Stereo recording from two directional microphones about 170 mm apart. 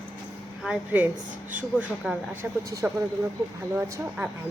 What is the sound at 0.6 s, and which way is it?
Speech, 10° right (ahead or behind).